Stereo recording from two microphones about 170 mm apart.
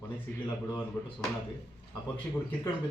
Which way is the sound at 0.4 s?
15° left (ahead or behind).